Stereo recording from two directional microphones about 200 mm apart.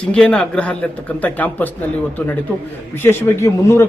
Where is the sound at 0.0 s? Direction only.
5° left (ahead or behind).